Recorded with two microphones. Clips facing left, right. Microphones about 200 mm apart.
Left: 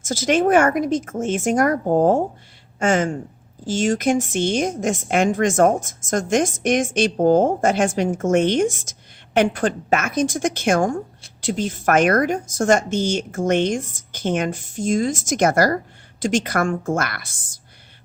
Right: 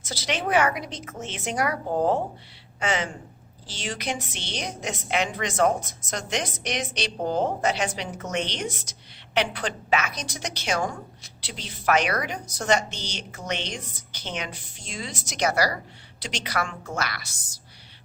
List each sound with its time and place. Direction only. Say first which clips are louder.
0.0 s a woman's voice: left 11 dB; 45° left (ahead or behind)